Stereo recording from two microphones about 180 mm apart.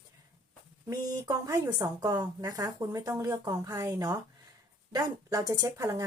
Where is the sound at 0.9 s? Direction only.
20° right (ahead or behind).